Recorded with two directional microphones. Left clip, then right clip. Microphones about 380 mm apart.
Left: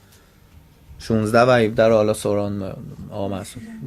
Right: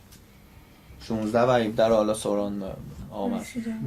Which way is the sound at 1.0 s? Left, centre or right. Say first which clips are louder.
Left 7 dB; left.